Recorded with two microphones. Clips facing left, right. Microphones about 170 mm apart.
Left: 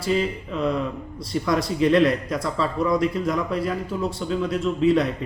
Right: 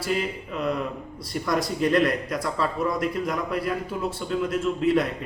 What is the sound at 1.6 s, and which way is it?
Speech, 25° left (ahead or behind).